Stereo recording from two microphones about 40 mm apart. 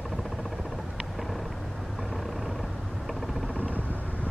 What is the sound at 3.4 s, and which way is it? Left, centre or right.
Vehicle, left.